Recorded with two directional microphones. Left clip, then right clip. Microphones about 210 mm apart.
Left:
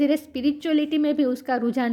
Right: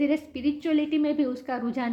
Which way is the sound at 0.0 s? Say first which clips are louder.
Left 4 dB; 50° left (ahead or behind).